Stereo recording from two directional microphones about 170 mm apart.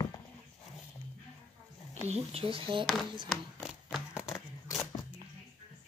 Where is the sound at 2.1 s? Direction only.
35° right (ahead or behind).